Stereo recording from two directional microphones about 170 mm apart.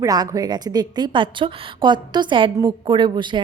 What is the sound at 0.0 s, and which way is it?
A woman's voice, 20° right (ahead or behind).